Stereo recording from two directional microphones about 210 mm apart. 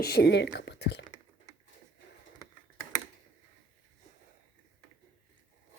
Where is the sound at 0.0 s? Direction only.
50° left (ahead or behind).